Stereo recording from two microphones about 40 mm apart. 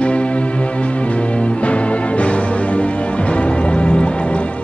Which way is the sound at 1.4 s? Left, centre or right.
Left.